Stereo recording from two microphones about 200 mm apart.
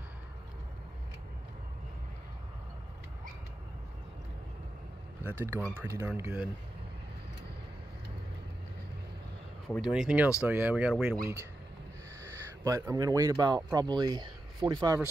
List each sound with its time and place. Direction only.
5.2 s speech: 10° right (ahead or behind)
9.8 s speech: 5° right (ahead or behind)
12.2 s speech: 15° right (ahead or behind)